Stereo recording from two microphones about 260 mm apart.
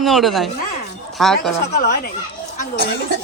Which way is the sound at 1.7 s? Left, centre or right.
Left.